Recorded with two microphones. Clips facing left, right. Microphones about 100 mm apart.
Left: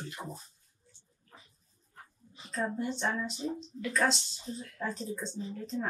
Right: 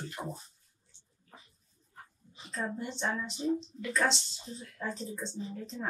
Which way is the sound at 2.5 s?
Centre (ahead or behind).